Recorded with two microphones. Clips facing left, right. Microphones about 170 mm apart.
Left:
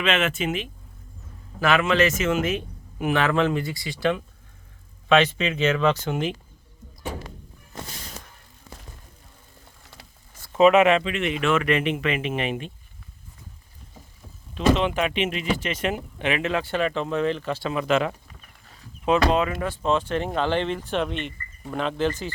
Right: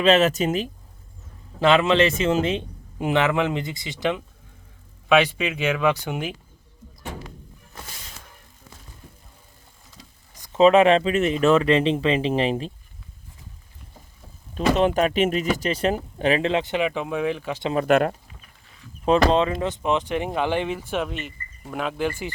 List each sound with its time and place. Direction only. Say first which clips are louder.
0.0 s speech: right 6 dB; 35° right (ahead or behind)
1.5 s a man's voice: right 3 dB; 25° right (ahead or behind); by 6.3 s 10° right (ahead or behind)
10.3 s a sound: even; 15° right (ahead or behind)
10.6 s speech: right 1 dB; 30° right (ahead or behind)
14.5 s speech: right 2 dB; 40° right (ahead or behind); by 17.7 s 10° right (ahead or behind)
17.7 s speech: right 4 dB; 50° right (ahead or behind)
19.0 s speech: right 2 dB; 30° right (ahead or behind); by 22.3 s 10° right (ahead or behind)